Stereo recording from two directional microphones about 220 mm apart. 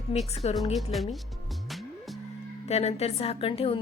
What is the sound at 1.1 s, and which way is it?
Music, centre (ahead or behind).